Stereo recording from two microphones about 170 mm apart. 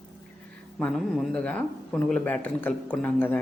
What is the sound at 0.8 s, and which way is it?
Speech, 5° left (ahead or behind).